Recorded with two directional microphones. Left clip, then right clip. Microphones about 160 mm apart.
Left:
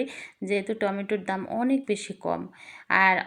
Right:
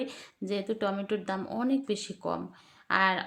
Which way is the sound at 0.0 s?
15° left (ahead or behind).